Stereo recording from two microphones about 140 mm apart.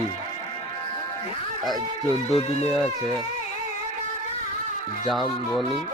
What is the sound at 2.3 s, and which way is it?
Speech, 45° left (ahead or behind).